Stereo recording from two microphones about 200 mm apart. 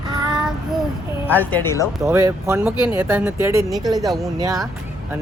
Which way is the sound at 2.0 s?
15° right (ahead or behind).